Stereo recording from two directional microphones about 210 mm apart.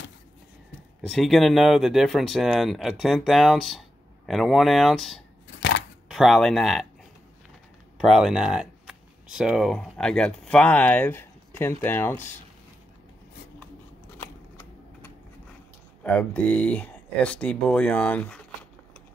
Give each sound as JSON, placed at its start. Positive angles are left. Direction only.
{"t": 1.0, "sound": "speech", "side_deg": 0}
{"t": 5.6, "sound": "a sound", "side_deg": 55}
{"t": 6.0, "sound": "speech", "side_deg": 0}
{"t": 8.0, "sound": "speech", "side_deg": 0}
{"t": 14.1, "sound": "a sound", "side_deg": 10}
{"t": 16.0, "sound": "speech", "side_deg": 5}